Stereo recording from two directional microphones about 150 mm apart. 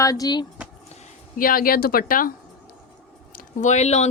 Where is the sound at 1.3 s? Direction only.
70° left (ahead or behind).